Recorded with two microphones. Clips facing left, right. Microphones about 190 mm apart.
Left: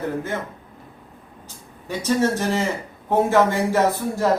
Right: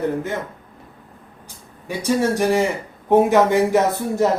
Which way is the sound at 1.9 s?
15° right (ahead or behind).